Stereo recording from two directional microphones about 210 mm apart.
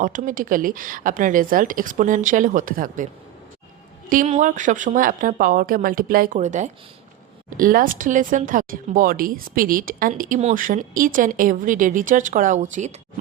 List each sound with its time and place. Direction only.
0.0 s speech: 40° right (ahead or behind)
4.1 s speech: 35° right (ahead or behind)